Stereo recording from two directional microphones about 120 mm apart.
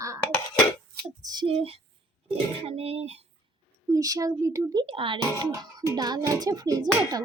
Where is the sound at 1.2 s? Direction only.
35° right (ahead or behind).